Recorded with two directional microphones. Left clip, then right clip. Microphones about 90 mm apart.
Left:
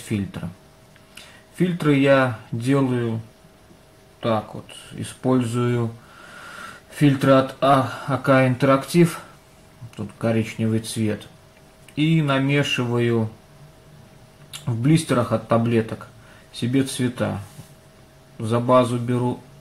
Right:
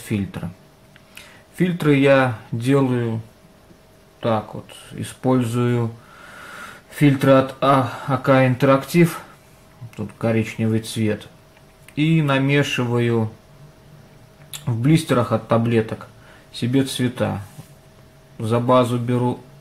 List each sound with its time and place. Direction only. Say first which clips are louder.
0.1 s speech: right 2 dB; 20° right (ahead or behind)
4.2 s speech: right 1 dB; 25° right (ahead or behind)
7.0 s speech: right 2 dB; 25° right (ahead or behind)
14.5 s speech: right 1 dB; 25° right (ahead or behind)
18.7 s speech: even; 20° right (ahead or behind)